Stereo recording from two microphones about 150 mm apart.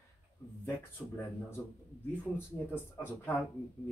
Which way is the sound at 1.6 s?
15° left (ahead or behind).